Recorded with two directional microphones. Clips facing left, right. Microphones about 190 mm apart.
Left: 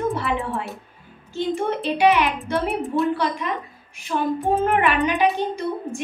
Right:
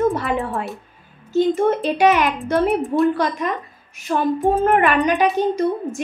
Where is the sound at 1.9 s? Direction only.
45° right (ahead or behind).